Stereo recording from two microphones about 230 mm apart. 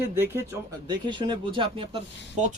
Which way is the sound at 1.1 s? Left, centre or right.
Right.